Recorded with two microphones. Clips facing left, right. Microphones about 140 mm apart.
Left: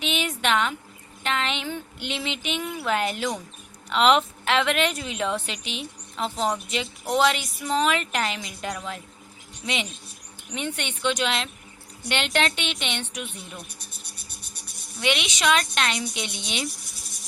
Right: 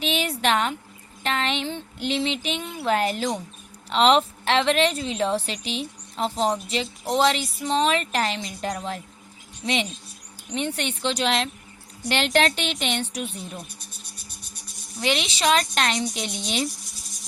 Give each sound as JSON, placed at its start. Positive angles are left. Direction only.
{"t": 0.0, "sound": "a sound", "side_deg": -35}
{"t": 0.4, "sound": "a woman's voice", "side_deg": -35}
{"t": 10.5, "sound": "a woman's voice", "side_deg": -35}
{"t": 14.9, "sound": "a woman's voice", "side_deg": -35}